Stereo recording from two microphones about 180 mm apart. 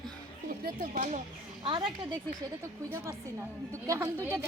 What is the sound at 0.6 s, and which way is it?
Speech, 45° right (ahead or behind).